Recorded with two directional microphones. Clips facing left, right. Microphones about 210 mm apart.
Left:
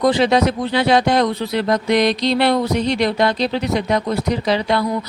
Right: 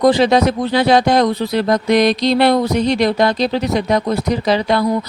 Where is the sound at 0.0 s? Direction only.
40° right (ahead or behind).